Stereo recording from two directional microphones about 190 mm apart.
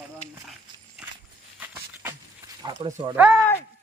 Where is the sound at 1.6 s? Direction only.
10° right (ahead or behind).